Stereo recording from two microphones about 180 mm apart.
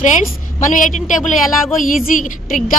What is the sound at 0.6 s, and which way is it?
A woman's voice, 45° left (ahead or behind).